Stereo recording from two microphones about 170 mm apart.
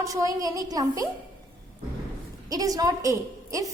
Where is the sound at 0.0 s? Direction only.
20° right (ahead or behind).